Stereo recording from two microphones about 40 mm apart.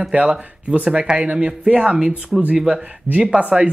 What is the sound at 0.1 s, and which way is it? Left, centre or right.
Speech, right.